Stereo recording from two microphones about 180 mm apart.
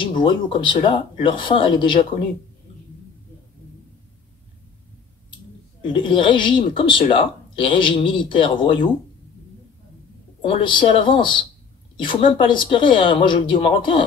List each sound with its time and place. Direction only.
0.0 s speech: 30° left (ahead or behind)
5.8 s speech: 25° left (ahead or behind)
10.4 s speech: 30° left (ahead or behind)